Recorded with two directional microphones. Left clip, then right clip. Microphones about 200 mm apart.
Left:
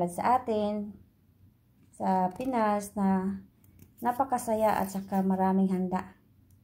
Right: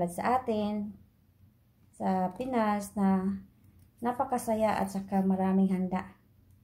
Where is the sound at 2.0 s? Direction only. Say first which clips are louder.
Left 3 dB; 15° left (ahead or behind).